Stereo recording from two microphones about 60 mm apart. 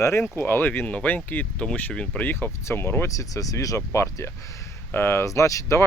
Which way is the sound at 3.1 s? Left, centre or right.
Left.